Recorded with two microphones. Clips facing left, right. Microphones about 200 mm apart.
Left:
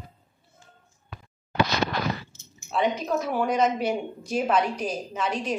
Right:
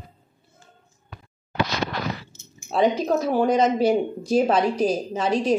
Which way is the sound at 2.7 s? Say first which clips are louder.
Right 5 dB; 35° right (ahead or behind).